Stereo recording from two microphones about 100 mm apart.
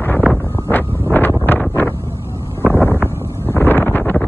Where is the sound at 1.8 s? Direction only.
20° left (ahead or behind).